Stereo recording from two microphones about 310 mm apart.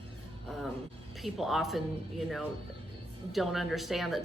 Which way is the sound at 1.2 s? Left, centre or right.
Centre.